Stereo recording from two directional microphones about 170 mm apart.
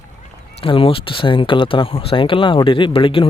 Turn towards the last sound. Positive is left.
turn(degrees=30)  # may be behind; listen again after turning